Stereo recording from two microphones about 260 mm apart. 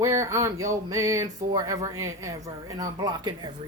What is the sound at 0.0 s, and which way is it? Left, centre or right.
Speech, centre.